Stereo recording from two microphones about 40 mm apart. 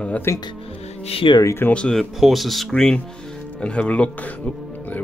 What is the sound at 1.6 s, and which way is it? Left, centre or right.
Speech, left.